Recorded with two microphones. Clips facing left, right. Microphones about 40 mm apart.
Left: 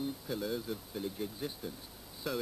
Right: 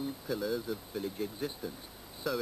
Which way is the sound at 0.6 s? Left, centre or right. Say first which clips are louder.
Right 2 dB; centre.